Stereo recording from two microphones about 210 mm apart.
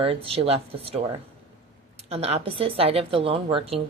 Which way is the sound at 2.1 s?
30° right (ahead or behind).